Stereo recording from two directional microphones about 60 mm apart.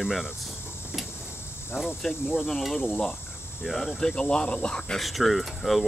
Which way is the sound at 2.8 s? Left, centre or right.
Left.